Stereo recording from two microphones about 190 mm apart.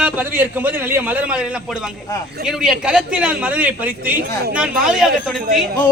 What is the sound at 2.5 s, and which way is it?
A man's voice, 5° right (ahead or behind).